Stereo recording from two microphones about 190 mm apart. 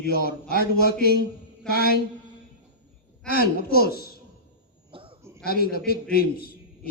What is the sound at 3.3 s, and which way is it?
Speech, 55° left (ahead or behind).